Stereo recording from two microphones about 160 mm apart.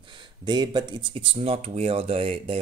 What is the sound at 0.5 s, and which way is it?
Speech, 30° right (ahead or behind).